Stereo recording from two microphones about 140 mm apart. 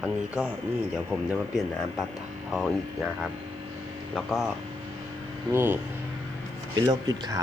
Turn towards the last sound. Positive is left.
turn(degrees=-25)  # may be behind; listen again after turning